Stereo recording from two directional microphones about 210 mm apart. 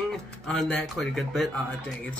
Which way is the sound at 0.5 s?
Centre (ahead or behind).